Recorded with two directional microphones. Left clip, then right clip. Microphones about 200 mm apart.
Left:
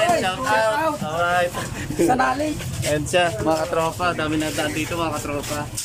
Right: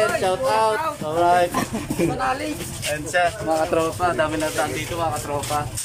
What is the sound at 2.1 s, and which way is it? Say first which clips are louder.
Speech: left 5 dB; 35° left (ahead or behind).